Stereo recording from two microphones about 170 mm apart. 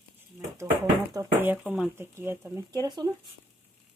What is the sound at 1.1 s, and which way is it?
Speech, 15° right (ahead or behind).